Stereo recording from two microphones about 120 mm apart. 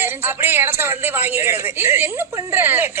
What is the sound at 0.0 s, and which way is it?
A woman's voice, 20° right (ahead or behind).